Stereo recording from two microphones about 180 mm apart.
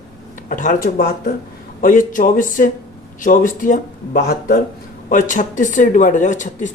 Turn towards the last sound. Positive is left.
turn(degrees=45)  # may be behind; listen again after turning